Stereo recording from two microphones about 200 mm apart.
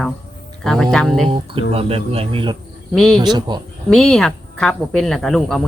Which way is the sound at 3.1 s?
20° right (ahead or behind).